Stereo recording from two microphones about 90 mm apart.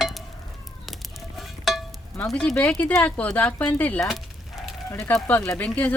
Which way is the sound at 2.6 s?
15° left (ahead or behind).